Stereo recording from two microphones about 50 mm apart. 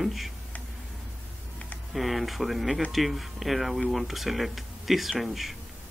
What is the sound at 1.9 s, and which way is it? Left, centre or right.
Speech, centre.